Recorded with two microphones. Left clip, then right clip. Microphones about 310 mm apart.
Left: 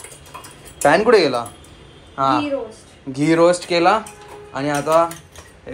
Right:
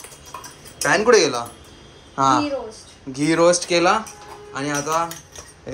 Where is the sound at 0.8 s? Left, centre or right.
Centre.